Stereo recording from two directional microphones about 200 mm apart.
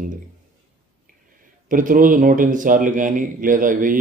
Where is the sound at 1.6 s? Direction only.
40° right (ahead or behind).